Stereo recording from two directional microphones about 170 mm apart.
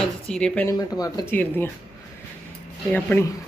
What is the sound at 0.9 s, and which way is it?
Speech, 20° left (ahead or behind).